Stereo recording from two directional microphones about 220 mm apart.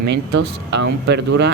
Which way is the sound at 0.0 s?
50° right (ahead or behind).